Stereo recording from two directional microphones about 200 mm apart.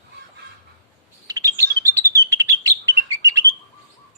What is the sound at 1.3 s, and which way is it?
Bird, 15° right (ahead or behind).